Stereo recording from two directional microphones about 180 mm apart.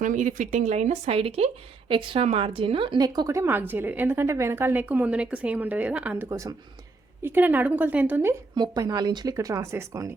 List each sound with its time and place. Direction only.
0.0 s a woman's voice: 45° right (ahead or behind); by 8.4 s 10° right (ahead or behind)
8.5 s speech: 25° right (ahead or behind)